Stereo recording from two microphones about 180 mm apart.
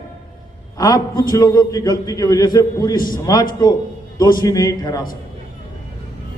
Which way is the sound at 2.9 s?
50° left (ahead or behind).